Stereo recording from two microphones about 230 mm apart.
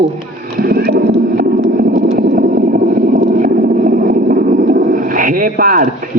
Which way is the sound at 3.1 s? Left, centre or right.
Right.